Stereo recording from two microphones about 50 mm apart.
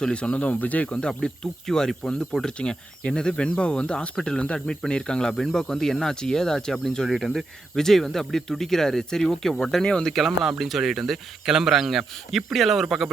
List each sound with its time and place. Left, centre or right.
0.0 s speech: left
1.0 s speech: centre
2.6 s speech: left; by 9.8 s centre
9.8 s speech: centre
10.1 s speech: centre